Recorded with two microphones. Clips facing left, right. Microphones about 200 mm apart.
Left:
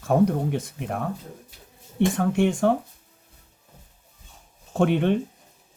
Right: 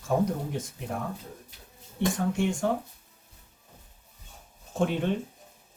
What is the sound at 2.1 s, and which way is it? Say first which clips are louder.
Speech: left 6 dB; 60° left (ahead or behind).